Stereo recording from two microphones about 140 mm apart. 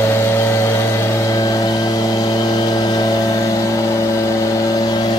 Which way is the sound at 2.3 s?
30° left (ahead or behind).